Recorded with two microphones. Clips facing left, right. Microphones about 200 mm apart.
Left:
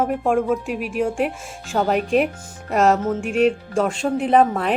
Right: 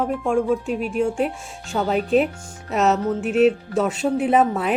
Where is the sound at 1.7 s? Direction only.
Centre (ahead or behind).